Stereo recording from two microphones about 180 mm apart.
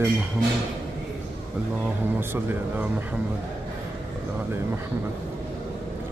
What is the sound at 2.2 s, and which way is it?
Speech, 10° right (ahead or behind).